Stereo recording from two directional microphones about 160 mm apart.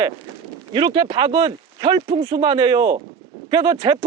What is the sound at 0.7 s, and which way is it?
Speech, 30° right (ahead or behind).